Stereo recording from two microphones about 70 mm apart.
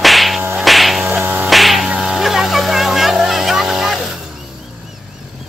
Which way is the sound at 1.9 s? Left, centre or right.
Centre.